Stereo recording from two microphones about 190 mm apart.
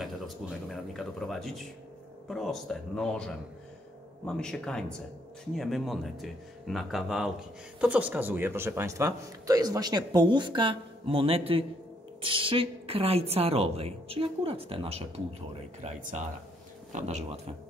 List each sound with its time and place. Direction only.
0.7 s speech: centre (ahead or behind)
4.3 s a woman's voice: 5° left (ahead or behind); by 17.4 s 40° right (ahead or behind)